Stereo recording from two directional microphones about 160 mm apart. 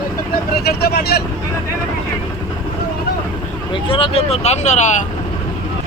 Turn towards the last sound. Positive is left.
turn(degrees=45)  # may be behind; listen again after turning